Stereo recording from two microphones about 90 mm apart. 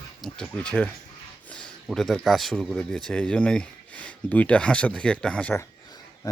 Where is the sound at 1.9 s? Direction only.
Centre (ahead or behind).